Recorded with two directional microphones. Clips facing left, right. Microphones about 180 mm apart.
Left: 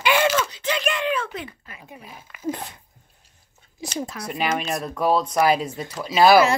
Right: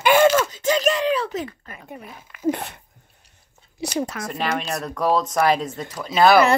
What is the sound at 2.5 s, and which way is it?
Speech, 65° right (ahead or behind).